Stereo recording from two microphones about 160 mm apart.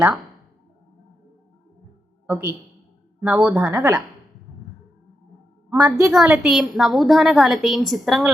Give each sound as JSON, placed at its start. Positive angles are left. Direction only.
{"t": 2.2, "sound": "speech", "side_deg": -15}
{"t": 5.7, "sound": "a woman's voice", "side_deg": -20}
{"t": 6.1, "sound": "a woman's voice", "side_deg": -5}